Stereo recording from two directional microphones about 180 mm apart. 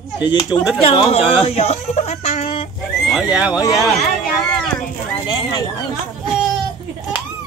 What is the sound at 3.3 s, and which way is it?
Speech, 10° right (ahead or behind).